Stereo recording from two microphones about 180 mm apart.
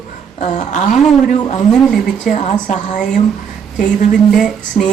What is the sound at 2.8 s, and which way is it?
A woman's voice, 45° left (ahead or behind).